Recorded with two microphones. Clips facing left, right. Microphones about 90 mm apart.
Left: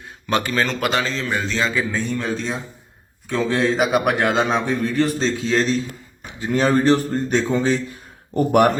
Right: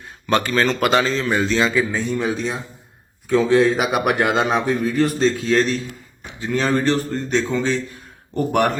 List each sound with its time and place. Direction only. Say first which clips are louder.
0.3 s a man's voice: right 2 dB; 5° left (ahead or behind); by 2.4 s 15° right (ahead or behind)
3.2 s a man's voice: right 5 dB; centre (ahead or behind)
6.4 s speech: left 2 dB; 10° left (ahead or behind)